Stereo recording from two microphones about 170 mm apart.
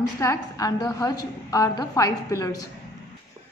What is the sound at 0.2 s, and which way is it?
A woman's voice, 20° left (ahead or behind).